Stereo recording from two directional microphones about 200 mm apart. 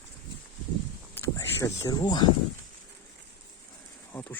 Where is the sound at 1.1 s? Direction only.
15° left (ahead or behind).